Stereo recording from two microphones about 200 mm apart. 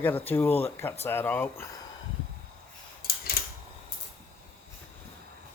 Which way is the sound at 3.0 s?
50° left (ahead or behind).